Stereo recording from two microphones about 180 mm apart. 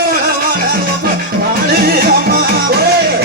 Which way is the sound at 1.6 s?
60° right (ahead or behind).